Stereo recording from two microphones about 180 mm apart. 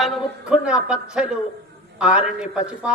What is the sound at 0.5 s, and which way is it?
A man's voice, 5° right (ahead or behind).